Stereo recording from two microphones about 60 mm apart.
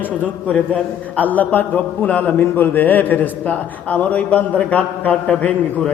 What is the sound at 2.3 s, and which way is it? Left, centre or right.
A man's voice, left.